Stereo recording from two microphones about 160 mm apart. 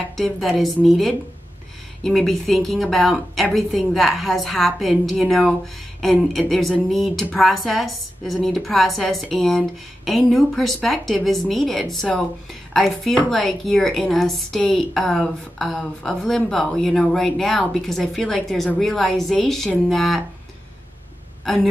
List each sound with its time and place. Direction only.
0.2 s a woman's voice: centre (ahead or behind)